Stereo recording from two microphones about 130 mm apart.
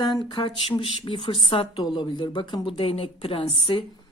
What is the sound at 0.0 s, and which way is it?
A woman's voice, 30° left (ahead or behind).